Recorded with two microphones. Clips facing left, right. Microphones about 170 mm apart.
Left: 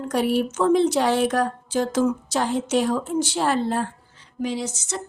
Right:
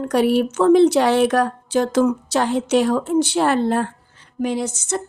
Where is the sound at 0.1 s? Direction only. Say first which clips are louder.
Right 4 dB; 70° right (ahead or behind).